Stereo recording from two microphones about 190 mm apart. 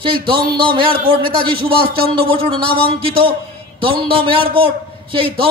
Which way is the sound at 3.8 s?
25° right (ahead or behind).